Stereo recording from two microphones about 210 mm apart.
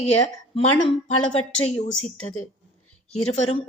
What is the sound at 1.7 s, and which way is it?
Speech, 30° left (ahead or behind).